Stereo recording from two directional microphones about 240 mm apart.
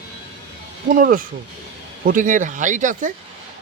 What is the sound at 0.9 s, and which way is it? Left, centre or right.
Speech, right.